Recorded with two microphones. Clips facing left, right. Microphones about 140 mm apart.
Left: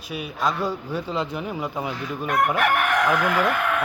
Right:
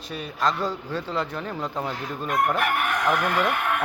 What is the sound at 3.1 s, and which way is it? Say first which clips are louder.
Speech: left 2 dB; 90° left.